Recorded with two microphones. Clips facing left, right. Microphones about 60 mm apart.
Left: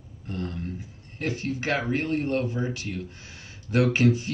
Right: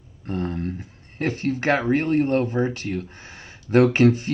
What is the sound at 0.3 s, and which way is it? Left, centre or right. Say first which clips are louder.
Speech: right 6 dB; right.